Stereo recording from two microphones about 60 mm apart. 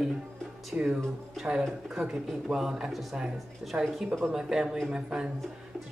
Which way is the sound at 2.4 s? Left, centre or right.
Centre.